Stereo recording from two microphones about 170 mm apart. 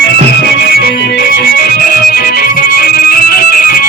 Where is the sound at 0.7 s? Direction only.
75° left (ahead or behind).